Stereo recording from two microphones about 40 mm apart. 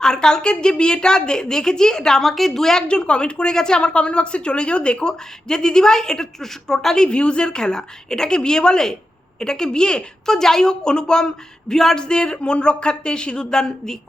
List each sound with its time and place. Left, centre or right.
0.0 s a woman's voice: centre
2.8 s speech: left; by 6.9 s centre
6.9 s a woman's voice: left